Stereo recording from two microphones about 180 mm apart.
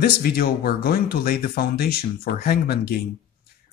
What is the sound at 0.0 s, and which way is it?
Speech, 55° left (ahead or behind).